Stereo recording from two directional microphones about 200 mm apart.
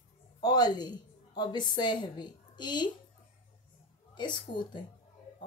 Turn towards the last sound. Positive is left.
turn(degrees=25)  # may be behind; listen again after turning